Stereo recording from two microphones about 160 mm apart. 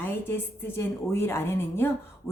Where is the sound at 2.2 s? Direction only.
Centre (ahead or behind).